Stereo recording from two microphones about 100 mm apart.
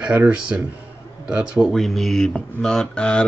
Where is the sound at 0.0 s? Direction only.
15° right (ahead or behind).